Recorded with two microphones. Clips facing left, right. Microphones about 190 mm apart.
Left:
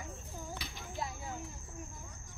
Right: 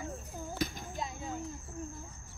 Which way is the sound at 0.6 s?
45° right (ahead or behind).